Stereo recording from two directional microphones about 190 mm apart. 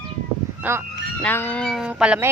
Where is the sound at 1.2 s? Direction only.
10° left (ahead or behind); by 2.2 s 5° right (ahead or behind).